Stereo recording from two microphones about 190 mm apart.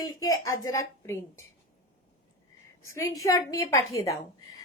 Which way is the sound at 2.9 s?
15° left (ahead or behind).